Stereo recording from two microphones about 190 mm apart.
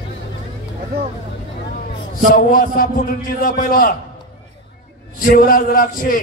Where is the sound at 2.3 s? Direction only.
50° left (ahead or behind).